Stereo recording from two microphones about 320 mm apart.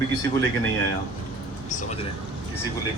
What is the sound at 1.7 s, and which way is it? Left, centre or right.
Speech, left.